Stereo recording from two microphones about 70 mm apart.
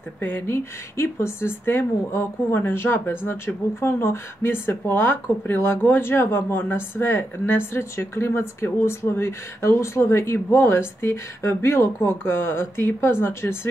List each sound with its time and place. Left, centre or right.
0.2 s speech: left